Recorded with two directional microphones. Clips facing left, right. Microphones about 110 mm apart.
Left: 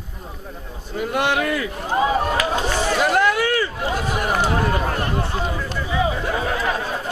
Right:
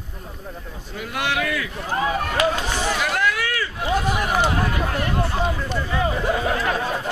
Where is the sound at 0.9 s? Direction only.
35° left (ahead or behind).